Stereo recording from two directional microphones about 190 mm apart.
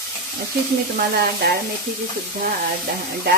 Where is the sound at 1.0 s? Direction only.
55° right (ahead or behind).